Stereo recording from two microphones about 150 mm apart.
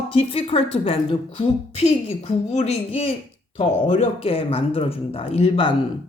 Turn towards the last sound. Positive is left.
turn(degrees=40)  # may be behind; listen again after turning